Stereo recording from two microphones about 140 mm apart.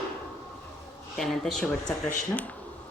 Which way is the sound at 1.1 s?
5° left (ahead or behind).